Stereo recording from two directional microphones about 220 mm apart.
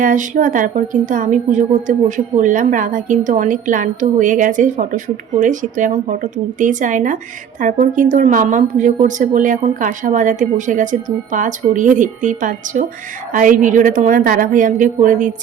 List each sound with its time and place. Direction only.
0.0 s a woman's voice: 35° right (ahead or behind)